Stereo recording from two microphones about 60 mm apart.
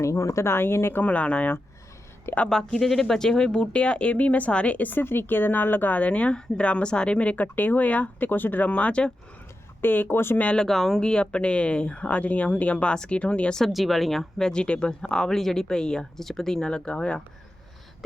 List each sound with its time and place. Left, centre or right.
0.0 s speech: left
0.4 s speech: left
1.0 s speech: left
2.5 s speech: centre
9.8 s speech: left
10.3 s speech: left
10.6 s speech: centre
13.6 s speech: centre